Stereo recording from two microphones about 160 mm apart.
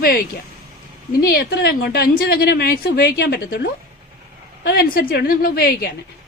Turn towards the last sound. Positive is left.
turn(degrees=70)  # may be behind; listen again after turning